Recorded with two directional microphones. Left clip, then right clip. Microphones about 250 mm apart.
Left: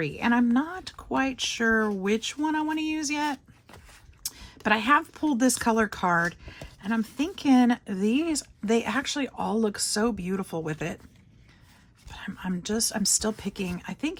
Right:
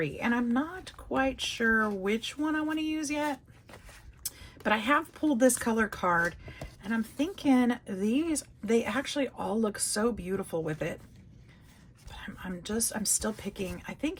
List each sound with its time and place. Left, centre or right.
0.0 s speech: left
4.2 s a sound: left
5.3 s speech: left
12.1 s speech: left